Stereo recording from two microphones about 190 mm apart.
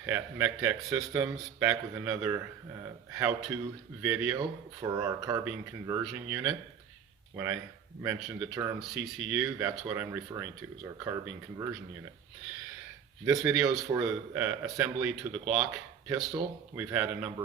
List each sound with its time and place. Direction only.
0.0 s speech: 10° right (ahead or behind)
4.4 s speech: 20° right (ahead or behind)
13.3 s speech: 5° right (ahead or behind)
16.0 s speech: 20° right (ahead or behind)